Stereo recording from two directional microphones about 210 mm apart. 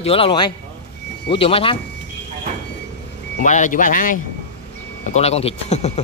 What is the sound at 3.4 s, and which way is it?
Speech, 35° left (ahead or behind).